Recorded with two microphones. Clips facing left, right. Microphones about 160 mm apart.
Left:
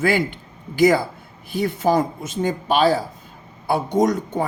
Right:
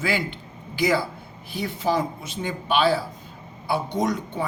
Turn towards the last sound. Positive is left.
turn(degrees=45)  # may be behind; listen again after turning